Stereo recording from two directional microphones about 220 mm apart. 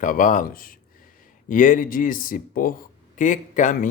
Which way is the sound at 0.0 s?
35° left (ahead or behind).